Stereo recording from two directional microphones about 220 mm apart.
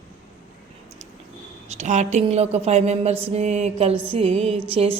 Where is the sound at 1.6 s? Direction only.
30° right (ahead or behind).